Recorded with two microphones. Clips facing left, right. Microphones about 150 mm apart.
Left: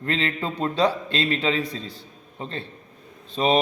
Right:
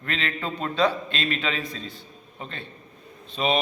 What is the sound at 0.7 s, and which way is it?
Speech, 35° left (ahead or behind).